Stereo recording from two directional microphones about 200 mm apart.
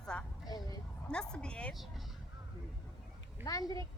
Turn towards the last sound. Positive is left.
turn(degrees=15)  # may be behind; listen again after turning